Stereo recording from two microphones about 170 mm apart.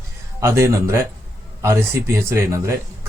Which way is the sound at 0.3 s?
15° right (ahead or behind).